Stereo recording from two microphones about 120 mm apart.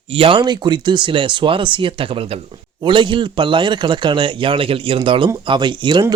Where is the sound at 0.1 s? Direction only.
50° right (ahead or behind).